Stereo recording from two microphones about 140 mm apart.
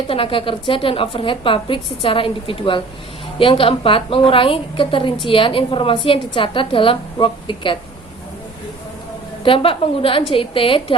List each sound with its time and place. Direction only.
0.1 s a woman's voice: 40° left (ahead or behind)
9.4 s a woman's voice: 40° left (ahead or behind)